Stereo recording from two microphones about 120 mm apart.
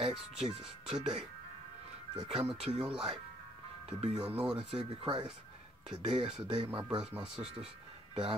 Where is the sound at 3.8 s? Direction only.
55° right (ahead or behind).